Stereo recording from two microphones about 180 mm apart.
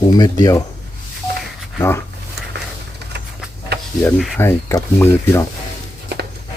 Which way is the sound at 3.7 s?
65° right (ahead or behind).